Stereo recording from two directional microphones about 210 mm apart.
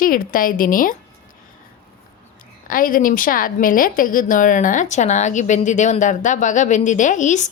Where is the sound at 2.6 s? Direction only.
40° left (ahead or behind).